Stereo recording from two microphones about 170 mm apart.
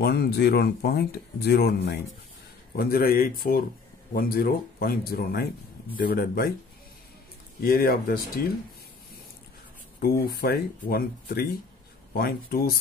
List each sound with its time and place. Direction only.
0.0 s speech: 70° left (ahead or behind)
2.7 s speech: 60° left (ahead or behind)
7.6 s speech: 60° left (ahead or behind)
10.0 s speech: 65° left (ahead or behind)